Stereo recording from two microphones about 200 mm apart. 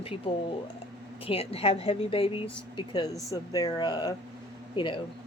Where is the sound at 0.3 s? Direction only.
25° left (ahead or behind).